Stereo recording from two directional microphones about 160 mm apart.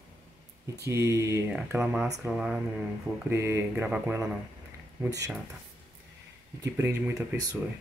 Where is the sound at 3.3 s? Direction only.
15° right (ahead or behind).